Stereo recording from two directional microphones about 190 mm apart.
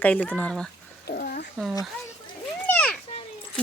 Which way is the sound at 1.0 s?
50° left (ahead or behind).